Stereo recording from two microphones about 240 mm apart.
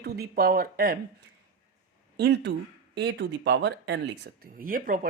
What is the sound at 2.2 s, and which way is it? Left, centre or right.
Speech, right.